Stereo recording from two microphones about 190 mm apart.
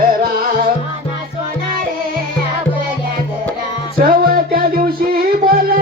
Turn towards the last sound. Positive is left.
turn(degrees=-50)  # may be behind; listen again after turning